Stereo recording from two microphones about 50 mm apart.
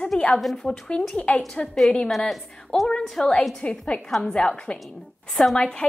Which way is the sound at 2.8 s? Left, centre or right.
Centre.